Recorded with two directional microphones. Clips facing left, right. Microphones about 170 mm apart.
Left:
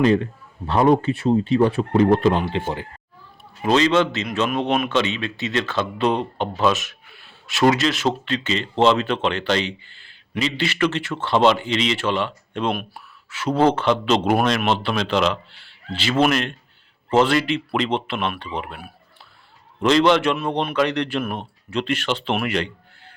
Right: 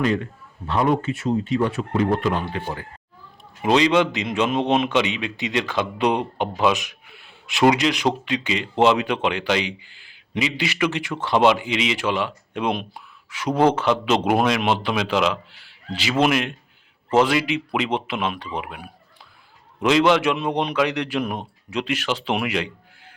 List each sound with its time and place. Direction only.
0.0 s speech: 30° left (ahead or behind)
3.6 s a man's voice: 15° right (ahead or behind)